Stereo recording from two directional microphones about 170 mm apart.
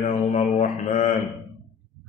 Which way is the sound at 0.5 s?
40° left (ahead or behind).